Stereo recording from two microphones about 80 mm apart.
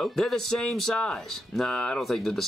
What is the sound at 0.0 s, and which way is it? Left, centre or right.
Speech, centre.